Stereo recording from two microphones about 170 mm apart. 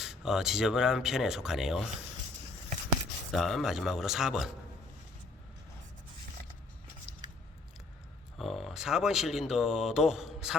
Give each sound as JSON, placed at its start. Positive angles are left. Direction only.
{"t": 0.0, "sound": "speech", "side_deg": -5}
{"t": 3.3, "sound": "speech", "side_deg": 0}
{"t": 8.4, "sound": "speech", "side_deg": 0}